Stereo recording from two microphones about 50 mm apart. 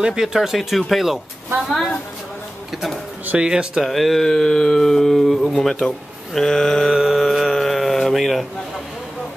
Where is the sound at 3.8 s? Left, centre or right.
Centre.